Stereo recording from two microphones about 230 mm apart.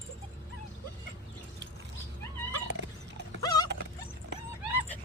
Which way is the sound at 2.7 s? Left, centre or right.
Right.